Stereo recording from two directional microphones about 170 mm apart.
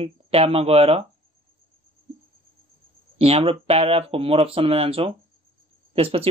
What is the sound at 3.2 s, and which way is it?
Speech, 35° right (ahead or behind).